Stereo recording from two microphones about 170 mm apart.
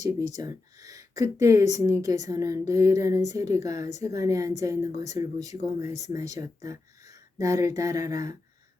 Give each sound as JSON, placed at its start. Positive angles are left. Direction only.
{"t": 0.0, "sound": "a woman's voice", "side_deg": -20}